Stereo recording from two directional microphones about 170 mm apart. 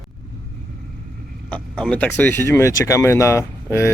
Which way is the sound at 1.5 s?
5° left (ahead or behind).